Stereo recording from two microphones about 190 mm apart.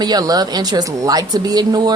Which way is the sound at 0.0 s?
20° right (ahead or behind).